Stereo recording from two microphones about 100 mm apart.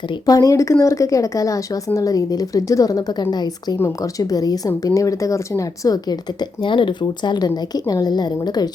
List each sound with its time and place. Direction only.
0.3 s speech: 35° left (ahead or behind)
3.8 s speech: 30° left (ahead or behind)